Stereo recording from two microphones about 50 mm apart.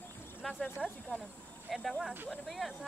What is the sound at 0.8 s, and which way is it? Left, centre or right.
Speech, centre.